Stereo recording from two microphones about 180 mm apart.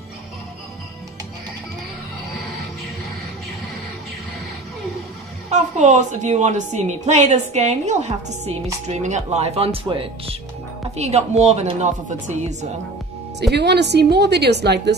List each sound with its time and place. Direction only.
5.5 s a woman's voice: 40° right (ahead or behind)
13.4 s a woman's voice: 70° right (ahead or behind)